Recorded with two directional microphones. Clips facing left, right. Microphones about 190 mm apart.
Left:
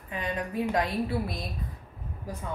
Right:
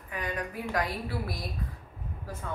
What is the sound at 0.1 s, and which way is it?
A woman's voice, 25° left (ahead or behind).